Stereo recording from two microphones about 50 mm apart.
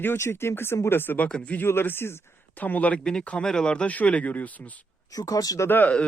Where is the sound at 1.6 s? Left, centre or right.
Left.